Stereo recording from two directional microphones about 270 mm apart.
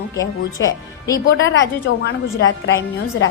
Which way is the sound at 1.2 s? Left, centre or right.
Left.